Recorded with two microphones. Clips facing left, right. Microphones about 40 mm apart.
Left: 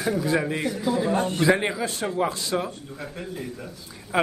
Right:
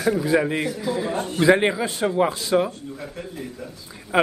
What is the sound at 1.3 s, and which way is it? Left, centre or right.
A man's voice, right.